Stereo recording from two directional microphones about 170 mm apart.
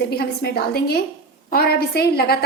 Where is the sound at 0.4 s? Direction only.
65° left (ahead or behind).